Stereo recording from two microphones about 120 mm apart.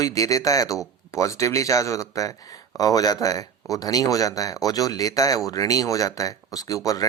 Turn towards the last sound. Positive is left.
turn(degrees=30)  # may be behind; listen again after turning